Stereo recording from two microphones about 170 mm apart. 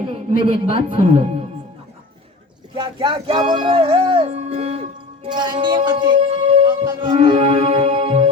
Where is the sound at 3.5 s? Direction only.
30° right (ahead or behind).